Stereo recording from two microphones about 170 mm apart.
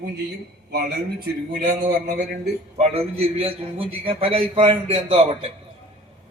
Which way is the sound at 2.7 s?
40° right (ahead or behind).